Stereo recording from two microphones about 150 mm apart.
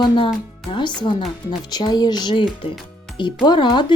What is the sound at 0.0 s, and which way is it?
Speech, 30° left (ahead or behind).